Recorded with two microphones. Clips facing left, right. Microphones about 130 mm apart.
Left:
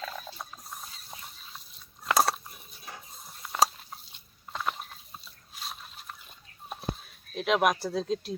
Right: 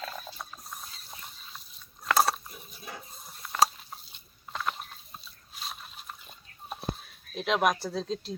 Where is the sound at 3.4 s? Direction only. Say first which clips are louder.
Even; 10° left (ahead or behind).